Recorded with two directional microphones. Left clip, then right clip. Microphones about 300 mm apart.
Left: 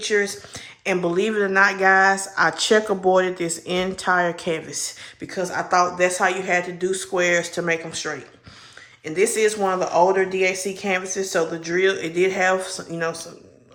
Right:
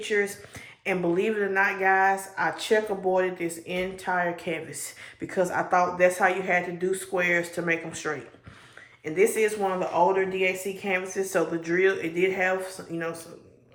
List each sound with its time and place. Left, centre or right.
0.1 s speech: centre
5.2 s speech: centre